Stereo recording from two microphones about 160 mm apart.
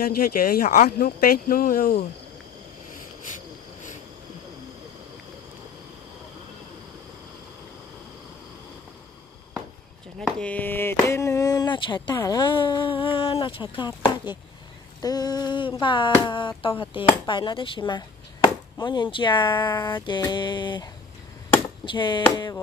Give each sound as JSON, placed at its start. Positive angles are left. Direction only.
{"t": 0.0, "sound": "speech", "side_deg": 65}
{"t": 10.1, "sound": "speech", "side_deg": 5}